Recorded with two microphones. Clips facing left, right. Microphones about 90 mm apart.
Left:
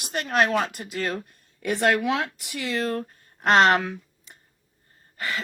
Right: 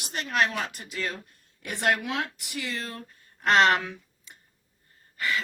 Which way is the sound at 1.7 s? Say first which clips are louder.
Left 5 dB; 90° left.